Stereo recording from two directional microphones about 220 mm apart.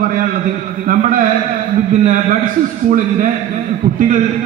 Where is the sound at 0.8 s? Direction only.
35° right (ahead or behind).